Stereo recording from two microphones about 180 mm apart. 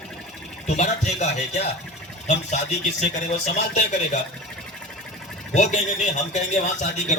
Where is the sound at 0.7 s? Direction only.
40° left (ahead or behind).